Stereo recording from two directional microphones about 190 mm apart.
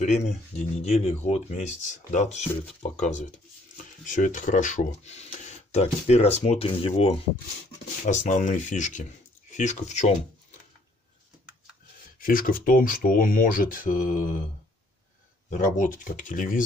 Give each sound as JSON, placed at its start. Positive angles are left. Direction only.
{"t": 0.0, "sound": "speech", "side_deg": 40}
{"t": 8.0, "sound": "speech", "side_deg": 40}
{"t": 12.2, "sound": "speech", "side_deg": 45}
{"t": 15.5, "sound": "speech", "side_deg": 45}